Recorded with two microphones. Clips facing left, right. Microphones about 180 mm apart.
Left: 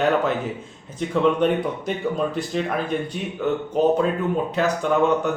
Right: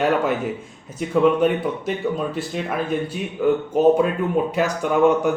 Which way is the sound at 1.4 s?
5° right (ahead or behind).